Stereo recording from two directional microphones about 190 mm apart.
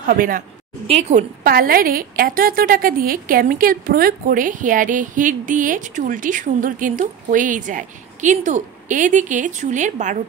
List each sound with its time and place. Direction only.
0.0 s a woman's voice: 45° right (ahead or behind)
0.8 s a woman's voice: 35° right (ahead or behind)
1.4 s a woman's voice: 50° right (ahead or behind)